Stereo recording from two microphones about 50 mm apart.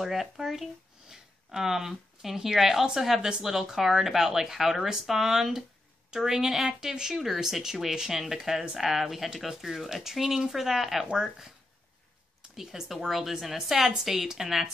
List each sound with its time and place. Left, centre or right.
0.0 s speech: centre
3.2 s speech: centre
3.4 s speech: centre
12.5 s speech: centre